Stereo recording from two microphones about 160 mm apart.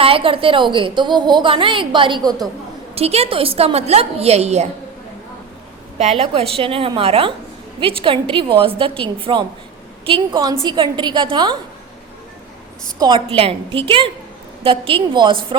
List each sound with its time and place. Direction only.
0.0 s a woman's voice: 35° right (ahead or behind)
6.0 s a woman's voice: 40° right (ahead or behind)
13.0 s a woman's voice: 30° right (ahead or behind)